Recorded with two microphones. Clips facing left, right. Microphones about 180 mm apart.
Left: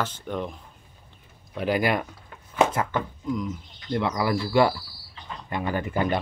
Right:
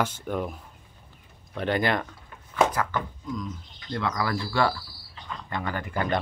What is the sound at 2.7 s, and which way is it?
Speech, 20° left (ahead or behind).